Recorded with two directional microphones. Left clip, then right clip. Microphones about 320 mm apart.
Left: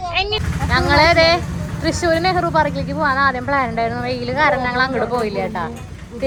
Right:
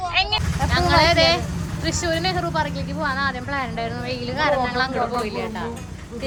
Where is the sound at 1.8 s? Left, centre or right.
Centre.